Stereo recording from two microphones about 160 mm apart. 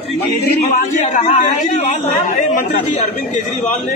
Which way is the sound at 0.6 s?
50° left (ahead or behind).